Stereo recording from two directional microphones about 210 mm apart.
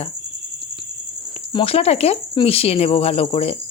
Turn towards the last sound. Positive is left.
turn(degrees=30)  # may be behind; listen again after turning